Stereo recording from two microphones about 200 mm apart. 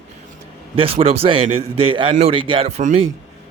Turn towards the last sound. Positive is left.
turn(degrees=-35)  # may be behind; listen again after turning